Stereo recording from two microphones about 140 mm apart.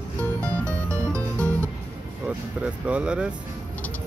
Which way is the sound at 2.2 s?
10° right (ahead or behind).